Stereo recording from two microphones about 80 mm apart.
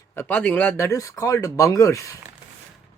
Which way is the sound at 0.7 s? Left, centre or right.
Left.